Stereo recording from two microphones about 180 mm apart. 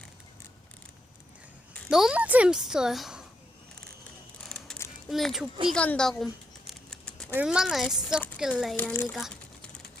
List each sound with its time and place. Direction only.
1.9 s a woman's voice: 5° right (ahead or behind)
4.4 s a sound: 5° left (ahead or behind)
5.6 s a woman's voice: 5° left (ahead or behind)
6.7 s a sound: 5° left (ahead or behind)
7.3 s a woman's voice: 5° right (ahead or behind)
8.7 s speech: 10° left (ahead or behind)
9.1 s crumpling: centre (ahead or behind)